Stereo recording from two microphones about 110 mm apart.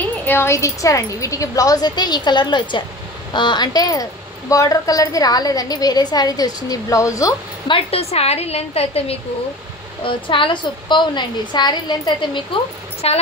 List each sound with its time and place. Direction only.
0.0 s speech: 15° left (ahead or behind)
7.6 s a woman's voice: 55° left (ahead or behind)
10.0 s a woman's voice: 50° left (ahead or behind)
13.0 s a woman's voice: 70° left (ahead or behind)